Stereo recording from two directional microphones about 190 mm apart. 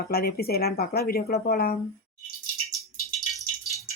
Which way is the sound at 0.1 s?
55° left (ahead or behind).